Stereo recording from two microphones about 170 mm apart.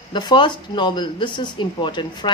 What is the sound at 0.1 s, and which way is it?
Speech, 25° left (ahead or behind).